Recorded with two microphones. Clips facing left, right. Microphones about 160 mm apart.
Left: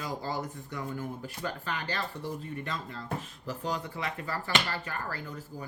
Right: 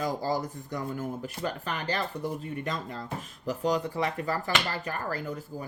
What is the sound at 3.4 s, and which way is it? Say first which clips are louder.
Speech: right 10 dB; 40° right (ahead or behind).